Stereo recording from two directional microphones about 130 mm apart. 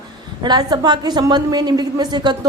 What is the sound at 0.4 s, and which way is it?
A woman's voice, 30° right (ahead or behind).